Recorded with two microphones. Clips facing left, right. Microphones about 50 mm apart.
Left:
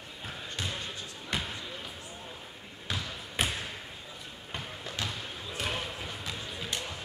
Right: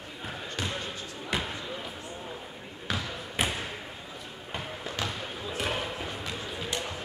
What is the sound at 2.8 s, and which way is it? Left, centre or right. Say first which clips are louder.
Basketball bounce: right 3 dB; centre.